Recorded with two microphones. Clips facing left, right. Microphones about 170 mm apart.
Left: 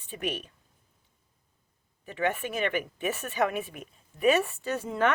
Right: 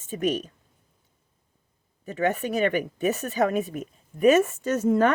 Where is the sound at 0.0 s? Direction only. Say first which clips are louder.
Right 8 dB; 40° right (ahead or behind).